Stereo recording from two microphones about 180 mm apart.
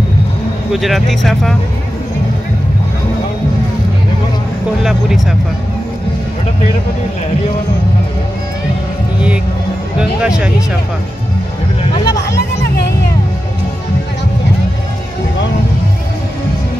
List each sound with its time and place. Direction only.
0.7 s speech: centre (ahead or behind)
4.8 s speech: centre (ahead or behind)
9.9 s speech: 5° right (ahead or behind)
12.5 s music: 70° left (ahead or behind)